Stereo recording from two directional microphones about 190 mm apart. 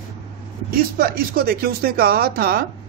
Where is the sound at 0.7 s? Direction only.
50° right (ahead or behind).